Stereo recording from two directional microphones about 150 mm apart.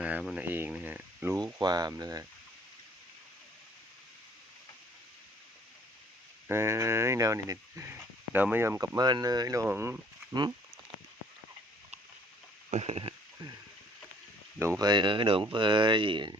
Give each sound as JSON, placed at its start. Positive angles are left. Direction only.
{"t": 0.0, "sound": "speech", "side_deg": -5}
{"t": 1.6, "sound": "speech", "side_deg": -25}
{"t": 6.5, "sound": "speech", "side_deg": -15}
{"t": 12.7, "sound": "speech", "side_deg": -45}
{"t": 14.6, "sound": "speech", "side_deg": -20}